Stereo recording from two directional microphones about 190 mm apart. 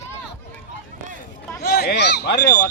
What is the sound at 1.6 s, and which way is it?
Speech, 55° left (ahead or behind).